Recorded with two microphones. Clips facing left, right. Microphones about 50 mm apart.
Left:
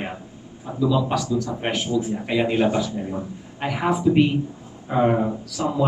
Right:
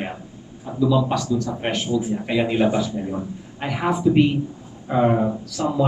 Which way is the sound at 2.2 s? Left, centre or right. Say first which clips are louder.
Even; centre.